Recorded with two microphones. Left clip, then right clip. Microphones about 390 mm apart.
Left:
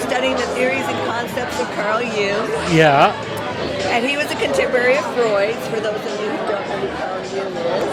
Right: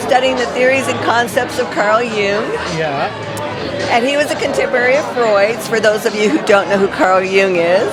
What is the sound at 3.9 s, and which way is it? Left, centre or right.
Speech, centre.